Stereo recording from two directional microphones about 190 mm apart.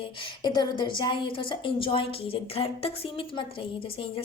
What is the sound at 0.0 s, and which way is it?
A woman's voice, 25° left (ahead or behind).